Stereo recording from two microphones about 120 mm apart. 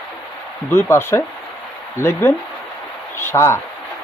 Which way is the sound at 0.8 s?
20° left (ahead or behind).